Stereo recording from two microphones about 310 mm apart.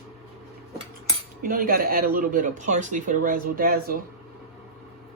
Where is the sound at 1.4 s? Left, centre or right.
Right.